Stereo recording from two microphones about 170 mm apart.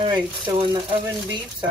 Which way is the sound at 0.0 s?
30° right (ahead or behind).